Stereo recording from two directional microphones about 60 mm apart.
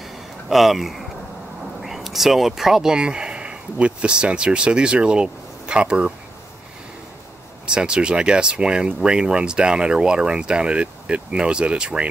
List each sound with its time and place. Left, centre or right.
0.0 s a sound: centre
1.8 s speech: centre
7.6 s speech: centre